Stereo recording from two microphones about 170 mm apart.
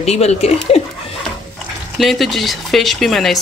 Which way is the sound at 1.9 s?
Centre (ahead or behind).